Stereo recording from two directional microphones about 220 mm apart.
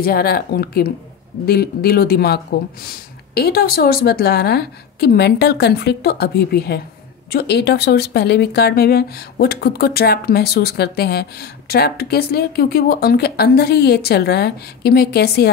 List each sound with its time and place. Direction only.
0.0 s speech: 45° left (ahead or behind)